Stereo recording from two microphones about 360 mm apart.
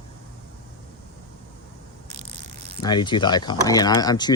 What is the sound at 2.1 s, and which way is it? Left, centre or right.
Mechanisms, centre.